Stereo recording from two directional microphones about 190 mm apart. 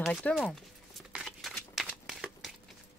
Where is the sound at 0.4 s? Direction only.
Centre (ahead or behind).